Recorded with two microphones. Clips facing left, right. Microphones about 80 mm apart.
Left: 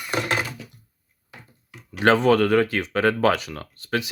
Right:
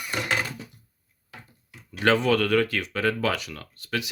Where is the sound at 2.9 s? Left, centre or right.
Left.